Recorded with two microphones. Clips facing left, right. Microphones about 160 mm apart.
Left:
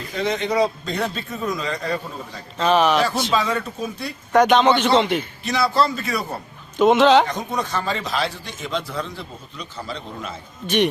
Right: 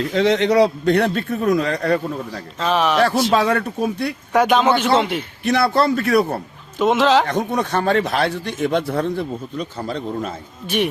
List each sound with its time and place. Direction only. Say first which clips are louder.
0.1 s a man's voice: right 5 dB; 85° right; by 2.4 s 65° right (ahead or behind)
2.6 s a man's voice: left 1 dB; centre (ahead or behind)
3.3 s a man's voice: right 4 dB; 65° right (ahead or behind)
4.3 s a man's voice: left 1 dB; 5° right (ahead or behind)
5.4 s a man's voice: right 5 dB; 60° right (ahead or behind)
6.7 s a man's voice: left 2 dB; centre (ahead or behind)
7.3 s a man's voice: right 5 dB; 60° right (ahead or behind); by 10.3 s 45° right (ahead or behind)